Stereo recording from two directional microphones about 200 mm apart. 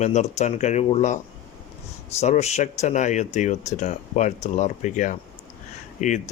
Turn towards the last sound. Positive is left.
turn(degrees=40)  # may be behind; listen again after turning